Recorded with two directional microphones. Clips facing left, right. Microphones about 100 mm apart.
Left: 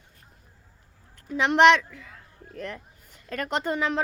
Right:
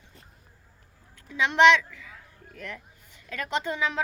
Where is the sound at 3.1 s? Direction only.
45° left (ahead or behind).